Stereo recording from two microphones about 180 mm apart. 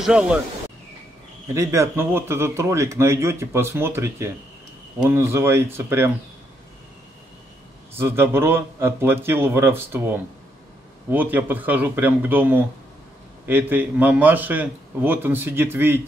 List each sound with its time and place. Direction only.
0.0 s speech: 5° right (ahead or behind)
1.5 s speech: 15° right (ahead or behind)
7.9 s speech: 10° right (ahead or behind)